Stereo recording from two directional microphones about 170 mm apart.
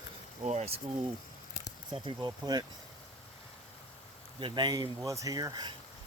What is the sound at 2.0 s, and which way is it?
Speech, 25° right (ahead or behind).